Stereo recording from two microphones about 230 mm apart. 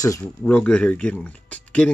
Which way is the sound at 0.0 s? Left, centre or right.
Centre.